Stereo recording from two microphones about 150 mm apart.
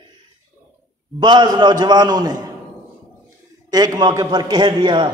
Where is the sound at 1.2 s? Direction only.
30° right (ahead or behind).